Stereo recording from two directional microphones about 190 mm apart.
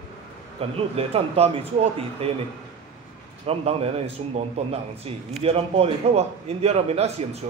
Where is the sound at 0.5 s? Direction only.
30° right (ahead or behind).